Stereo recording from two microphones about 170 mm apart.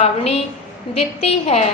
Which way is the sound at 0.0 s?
40° left (ahead or behind).